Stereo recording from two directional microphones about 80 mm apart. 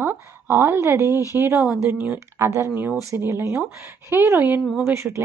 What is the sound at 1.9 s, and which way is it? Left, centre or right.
Speech, right.